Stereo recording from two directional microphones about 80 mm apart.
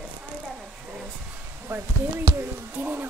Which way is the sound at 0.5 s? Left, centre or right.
Centre.